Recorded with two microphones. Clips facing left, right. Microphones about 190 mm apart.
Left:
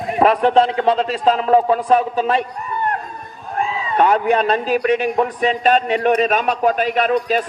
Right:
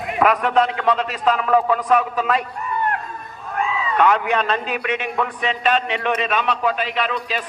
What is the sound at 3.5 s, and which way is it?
A man's voice, 35° left (ahead or behind).